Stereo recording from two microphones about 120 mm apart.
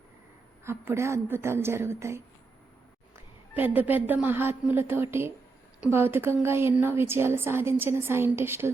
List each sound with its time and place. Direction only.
0.6 s a woman's voice: 20° right (ahead or behind)
3.5 s a woman's voice: 15° right (ahead or behind)